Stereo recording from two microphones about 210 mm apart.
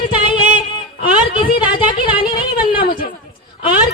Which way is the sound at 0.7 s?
25° left (ahead or behind).